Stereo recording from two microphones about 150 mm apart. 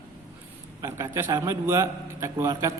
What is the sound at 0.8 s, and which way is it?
A man's voice, 20° right (ahead or behind).